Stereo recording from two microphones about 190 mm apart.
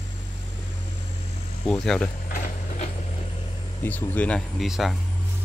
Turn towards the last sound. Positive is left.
turn(degrees=0)  # may be behind; listen again after turning